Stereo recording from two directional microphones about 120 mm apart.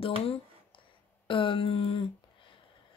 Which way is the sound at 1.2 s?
45° left (ahead or behind).